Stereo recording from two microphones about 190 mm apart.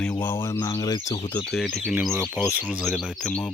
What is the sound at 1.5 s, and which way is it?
Speech, centre (ahead or behind).